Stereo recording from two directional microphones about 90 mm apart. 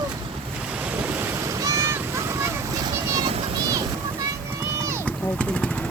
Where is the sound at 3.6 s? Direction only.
40° right (ahead or behind).